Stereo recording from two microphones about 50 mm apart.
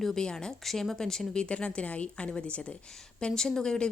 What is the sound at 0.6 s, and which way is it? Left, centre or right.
A woman's voice, centre.